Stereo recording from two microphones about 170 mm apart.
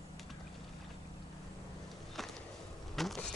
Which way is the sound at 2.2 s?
Centre (ahead or behind).